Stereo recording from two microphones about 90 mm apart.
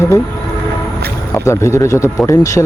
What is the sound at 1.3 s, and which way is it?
Speech, 30° left (ahead or behind).